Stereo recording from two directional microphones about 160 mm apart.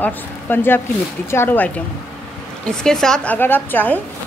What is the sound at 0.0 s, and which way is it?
A woman's voice, 15° left (ahead or behind).